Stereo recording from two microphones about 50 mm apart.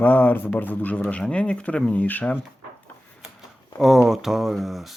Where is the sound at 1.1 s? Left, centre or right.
Left.